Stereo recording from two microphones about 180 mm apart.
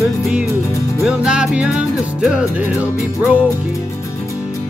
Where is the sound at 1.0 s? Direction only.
5° right (ahead or behind).